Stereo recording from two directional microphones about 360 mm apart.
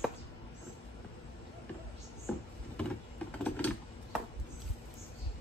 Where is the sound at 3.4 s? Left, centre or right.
Centre.